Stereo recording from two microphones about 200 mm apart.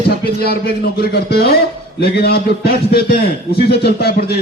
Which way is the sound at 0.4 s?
50° left (ahead or behind).